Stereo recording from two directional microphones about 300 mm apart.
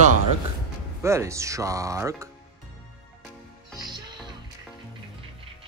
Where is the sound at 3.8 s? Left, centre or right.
Centre.